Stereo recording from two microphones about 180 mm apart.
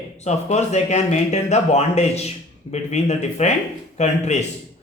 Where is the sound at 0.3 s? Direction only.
40° left (ahead or behind).